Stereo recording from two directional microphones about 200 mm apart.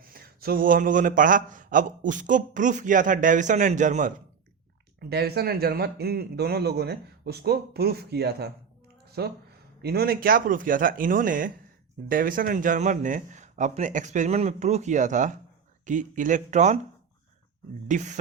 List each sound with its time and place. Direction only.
0.0 s a man's voice: 45° right (ahead or behind)
4.9 s a man's voice: 55° right (ahead or behind)
9.0 s a sound: 55° right (ahead or behind)
9.8 s a man's voice: 50° right (ahead or behind); by 16.8 s 35° right (ahead or behind)
17.8 s a man's voice: 40° right (ahead or behind)